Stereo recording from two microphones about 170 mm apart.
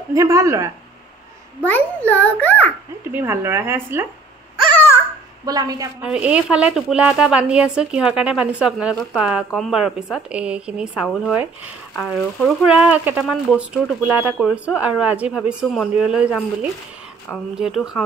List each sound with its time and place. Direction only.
0.1 s speech: 20° right (ahead or behind)
1.6 s a child's voice: 10° left (ahead or behind)
3.1 s speech: 10° right (ahead or behind)
4.7 s babbling: 15° left (ahead or behind)
5.4 s speech: 20° right (ahead or behind)
6.0 s speech: 5° right (ahead or behind)
17.6 s speech: 5° right (ahead or behind)